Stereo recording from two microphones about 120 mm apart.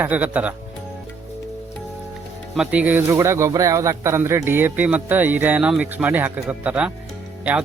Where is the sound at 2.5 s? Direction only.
10° right (ahead or behind).